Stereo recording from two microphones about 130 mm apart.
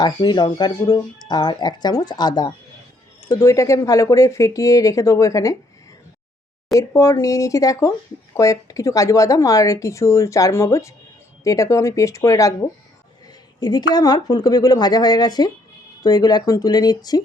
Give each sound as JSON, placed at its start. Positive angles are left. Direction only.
{"t": 0.0, "sound": "speech", "side_deg": 35}
{"t": 6.7, "sound": "speech", "side_deg": 25}